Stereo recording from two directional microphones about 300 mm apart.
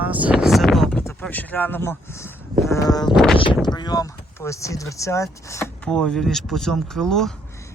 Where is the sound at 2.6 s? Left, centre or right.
Centre.